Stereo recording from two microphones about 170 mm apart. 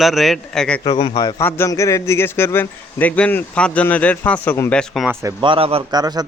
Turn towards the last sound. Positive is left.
turn(degrees=-25)  # may be behind; listen again after turning